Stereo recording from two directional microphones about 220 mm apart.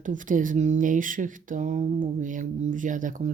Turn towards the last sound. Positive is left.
turn(degrees=-35)  # may be behind; listen again after turning